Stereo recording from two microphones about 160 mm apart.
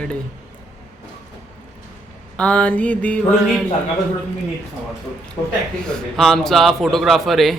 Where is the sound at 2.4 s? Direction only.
5° left (ahead or behind).